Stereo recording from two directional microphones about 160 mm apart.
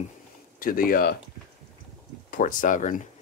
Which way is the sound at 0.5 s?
60° left (ahead or behind).